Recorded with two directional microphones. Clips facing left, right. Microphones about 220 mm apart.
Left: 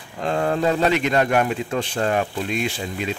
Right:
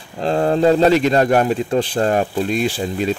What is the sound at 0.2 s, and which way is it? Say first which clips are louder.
Speech: right 5 dB; 30° right (ahead or behind).